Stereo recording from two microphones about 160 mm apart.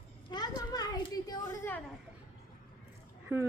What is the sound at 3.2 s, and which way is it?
Speech, 15° right (ahead or behind).